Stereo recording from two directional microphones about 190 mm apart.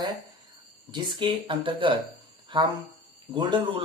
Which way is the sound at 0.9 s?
25° right (ahead or behind).